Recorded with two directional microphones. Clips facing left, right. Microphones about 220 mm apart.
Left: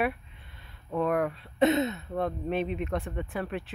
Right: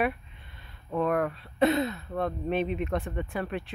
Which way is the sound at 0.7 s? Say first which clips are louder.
Even; 10° left (ahead or behind).